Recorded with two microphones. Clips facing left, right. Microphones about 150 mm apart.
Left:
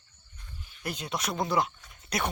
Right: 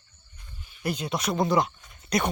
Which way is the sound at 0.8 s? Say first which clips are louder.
Right 5 dB; centre (ahead or behind).